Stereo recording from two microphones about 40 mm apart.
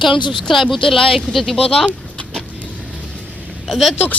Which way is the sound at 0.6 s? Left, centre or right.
Centre.